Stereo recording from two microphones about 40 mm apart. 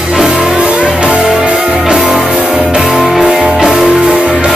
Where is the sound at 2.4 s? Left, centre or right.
Right.